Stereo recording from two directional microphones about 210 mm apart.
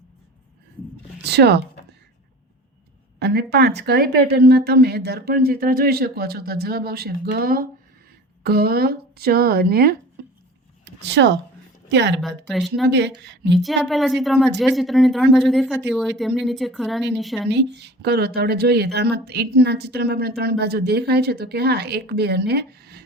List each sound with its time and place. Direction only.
1.2 s a woman's voice: 50° right (ahead or behind)
3.2 s a woman's voice: 50° right (ahead or behind)
11.0 s speech: 55° right (ahead or behind)
12.5 s speech: centre (ahead or behind)
12.9 s speech: 55° right (ahead or behind)
13.5 s speech: centre (ahead or behind)
17.5 s a woman's voice: 55° right (ahead or behind)